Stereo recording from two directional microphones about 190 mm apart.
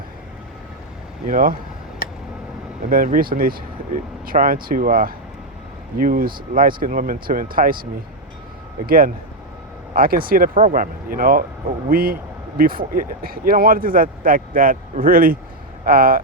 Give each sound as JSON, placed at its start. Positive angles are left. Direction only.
{"t": 1.3, "sound": "speech", "side_deg": -45}
{"t": 2.9, "sound": "speech", "side_deg": -50}
{"t": 8.9, "sound": "speech", "side_deg": -50}